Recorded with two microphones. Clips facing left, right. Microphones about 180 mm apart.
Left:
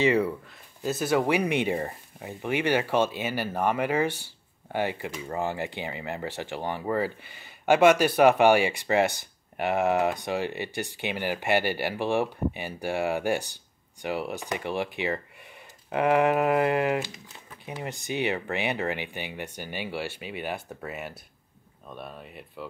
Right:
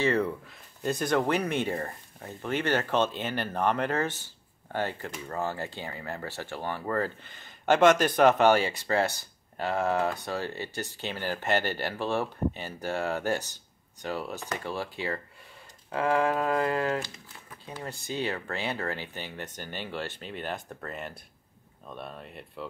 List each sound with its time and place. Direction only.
0.0 s speech: 10° left (ahead or behind)